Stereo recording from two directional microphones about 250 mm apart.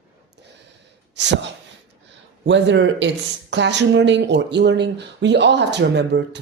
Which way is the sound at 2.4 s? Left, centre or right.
Right.